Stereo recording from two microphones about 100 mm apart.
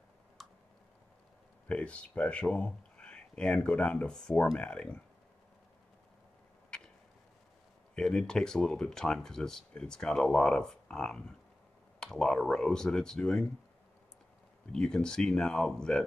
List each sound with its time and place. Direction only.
0.4 s clicking: centre (ahead or behind)
1.7 s speech: 10° left (ahead or behind)
7.9 s speech: 5° left (ahead or behind)
14.7 s speech: 5° left (ahead or behind)